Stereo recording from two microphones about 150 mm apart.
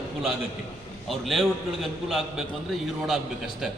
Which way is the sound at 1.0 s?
Centre (ahead or behind).